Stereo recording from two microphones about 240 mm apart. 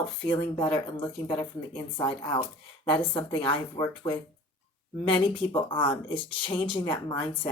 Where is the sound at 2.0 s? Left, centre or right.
Centre.